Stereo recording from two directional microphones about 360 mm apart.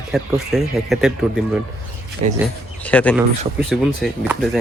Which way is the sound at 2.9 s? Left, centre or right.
Centre.